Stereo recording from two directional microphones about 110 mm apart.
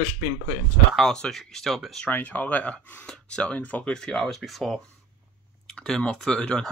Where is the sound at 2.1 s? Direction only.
15° left (ahead or behind).